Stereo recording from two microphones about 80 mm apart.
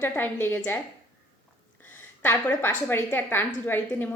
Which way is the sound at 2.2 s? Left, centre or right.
Left.